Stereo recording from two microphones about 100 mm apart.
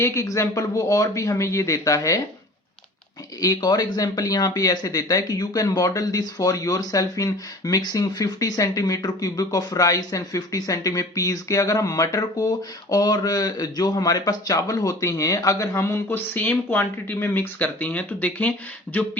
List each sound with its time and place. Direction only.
0.0 s speech: 30° left (ahead or behind)
3.4 s speech: 40° left (ahead or behind); by 18.5 s 15° left (ahead or behind)